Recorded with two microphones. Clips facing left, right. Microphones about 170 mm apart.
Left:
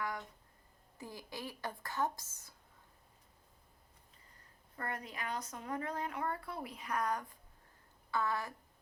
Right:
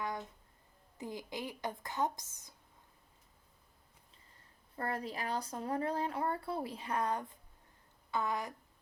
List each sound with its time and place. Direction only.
0.0 s a sound: 20° right (ahead or behind)
0.9 s speech: 20° right (ahead or behind)
4.8 s a woman's voice: 30° right (ahead or behind)